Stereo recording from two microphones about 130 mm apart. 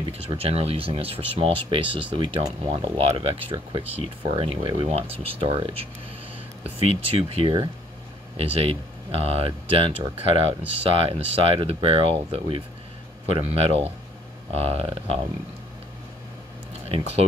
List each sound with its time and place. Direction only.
0.3 s speech: 50° right (ahead or behind)